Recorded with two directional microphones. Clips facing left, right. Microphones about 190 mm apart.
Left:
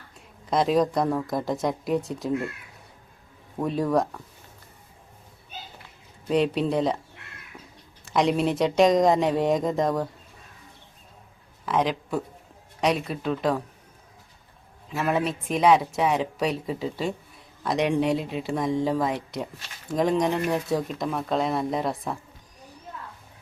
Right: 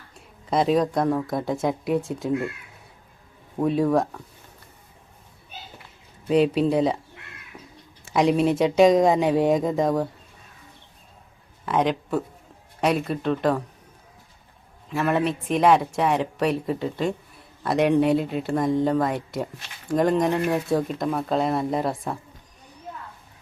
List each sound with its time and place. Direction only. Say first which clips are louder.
0.5 s speech: right 1 dB; centre (ahead or behind)
3.6 s speech: right 3 dB; centre (ahead or behind)
6.2 s speech: right 4 dB; 5° right (ahead or behind)
7.5 s crow: right 2 dB; 5° right (ahead or behind)
8.0 s speech: right 3 dB; 5° right (ahead or behind)
11.6 s speech: right 2 dB; centre (ahead or behind)
14.8 s speech: right 3 dB; centre (ahead or behind)